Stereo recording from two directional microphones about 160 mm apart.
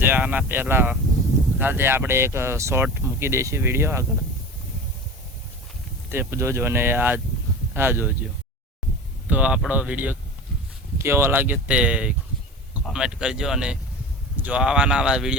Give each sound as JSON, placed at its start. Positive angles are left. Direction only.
{"t": 0.0, "sound": "speech", "side_deg": -10}
{"t": 6.1, "sound": "speech", "side_deg": -15}
{"t": 9.3, "sound": "speech", "side_deg": -5}